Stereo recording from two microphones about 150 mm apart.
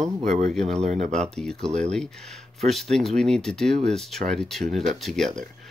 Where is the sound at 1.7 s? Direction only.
50° right (ahead or behind).